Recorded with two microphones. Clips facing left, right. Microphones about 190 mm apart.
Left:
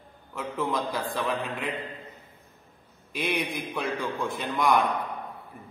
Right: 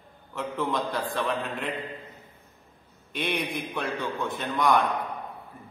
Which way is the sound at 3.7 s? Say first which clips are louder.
Left 2 dB; 5° left (ahead or behind).